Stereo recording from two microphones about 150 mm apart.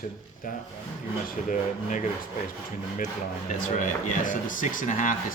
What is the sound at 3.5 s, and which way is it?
Speech, 60° left (ahead or behind).